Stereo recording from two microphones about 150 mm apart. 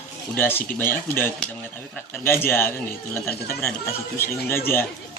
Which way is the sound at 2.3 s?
15° left (ahead or behind).